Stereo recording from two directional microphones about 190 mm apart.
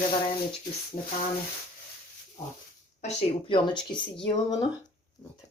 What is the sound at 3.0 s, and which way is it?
Speech, 30° left (ahead or behind).